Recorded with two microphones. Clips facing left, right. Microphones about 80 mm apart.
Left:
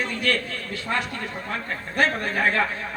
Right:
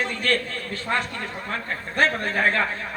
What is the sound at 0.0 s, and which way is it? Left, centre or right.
A man's voice, right.